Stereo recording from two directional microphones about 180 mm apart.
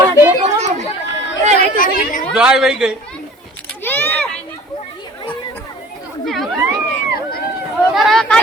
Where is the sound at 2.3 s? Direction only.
5° right (ahead or behind).